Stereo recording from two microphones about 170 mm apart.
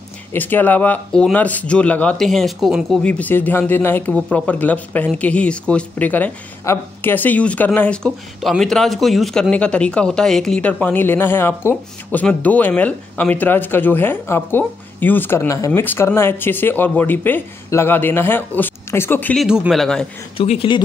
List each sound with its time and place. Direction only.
0.3 s speech: 10° left (ahead or behind)
19.4 s speech: 5° right (ahead or behind)
20.3 s speech: 35° left (ahead or behind)